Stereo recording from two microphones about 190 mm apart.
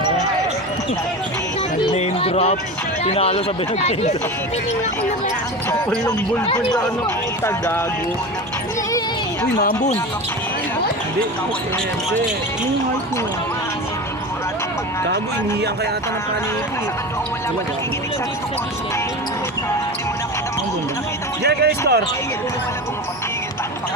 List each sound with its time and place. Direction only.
1.9 s music: 35° left (ahead or behind)
3.0 s speech: 30° left (ahead or behind)
7.4 s speech: 15° left (ahead or behind)
9.6 s speech: 40° left (ahead or behind)
21.4 s speech: 60° right (ahead or behind)